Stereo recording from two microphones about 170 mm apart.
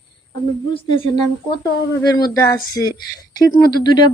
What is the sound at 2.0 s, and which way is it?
Speech, 25° left (ahead or behind).